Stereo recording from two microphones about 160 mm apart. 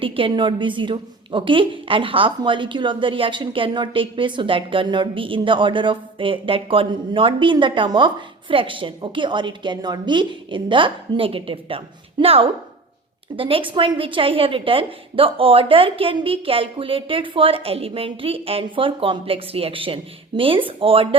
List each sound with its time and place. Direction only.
0.0 s a woman's voice: 35° right (ahead or behind)